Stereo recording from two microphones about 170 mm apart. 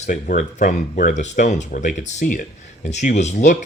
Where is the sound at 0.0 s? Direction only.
45° left (ahead or behind).